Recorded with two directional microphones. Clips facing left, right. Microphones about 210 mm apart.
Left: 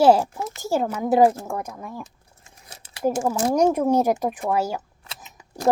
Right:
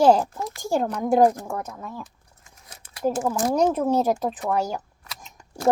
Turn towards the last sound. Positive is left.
turn(degrees=0)  # may be behind; listen again after turning